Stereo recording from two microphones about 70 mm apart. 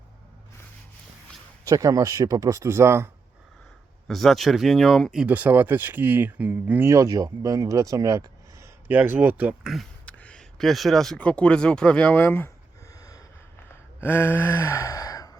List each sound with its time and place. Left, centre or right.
1.6 s speech: right
4.1 s speech: centre
5.2 s speech: right
6.8 s speech: right
8.9 s speech: right
10.1 s a sound: centre
10.6 s speech: centre
11.2 s speech: centre
12.9 s gasp: left
14.0 s gasp: left